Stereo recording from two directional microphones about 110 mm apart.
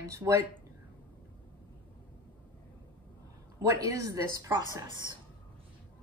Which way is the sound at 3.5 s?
35° right (ahead or behind).